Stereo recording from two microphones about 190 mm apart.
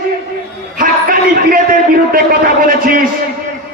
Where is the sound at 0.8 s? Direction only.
45° right (ahead or behind).